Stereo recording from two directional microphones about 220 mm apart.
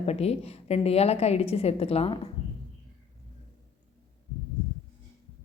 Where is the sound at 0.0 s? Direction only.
30° left (ahead or behind).